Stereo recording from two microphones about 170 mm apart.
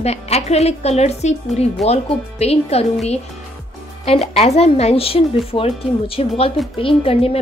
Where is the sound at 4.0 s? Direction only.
35° left (ahead or behind).